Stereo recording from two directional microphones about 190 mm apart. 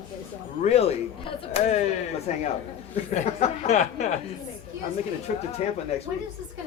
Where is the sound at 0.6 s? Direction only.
35° left (ahead or behind).